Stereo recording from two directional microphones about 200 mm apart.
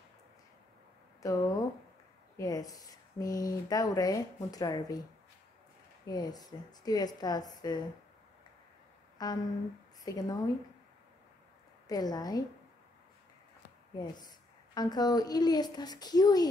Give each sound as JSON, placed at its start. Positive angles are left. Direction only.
{"t": 1.2, "sound": "speech", "side_deg": 15}
{"t": 6.0, "sound": "a woman's voice", "side_deg": 20}
{"t": 9.2, "sound": "a woman's voice", "side_deg": 20}
{"t": 11.9, "sound": "a woman's voice", "side_deg": 20}
{"t": 13.9, "sound": "a woman's voice", "side_deg": 20}